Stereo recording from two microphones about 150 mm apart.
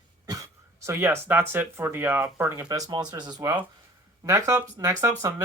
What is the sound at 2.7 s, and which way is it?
Speech, 25° right (ahead or behind).